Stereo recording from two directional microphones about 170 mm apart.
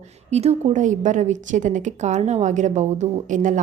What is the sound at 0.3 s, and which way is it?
A woman's voice, 40° right (ahead or behind).